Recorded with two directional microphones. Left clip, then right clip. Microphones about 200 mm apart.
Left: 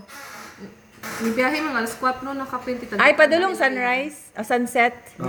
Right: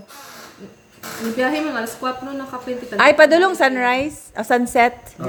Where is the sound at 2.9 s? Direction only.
15° right (ahead or behind).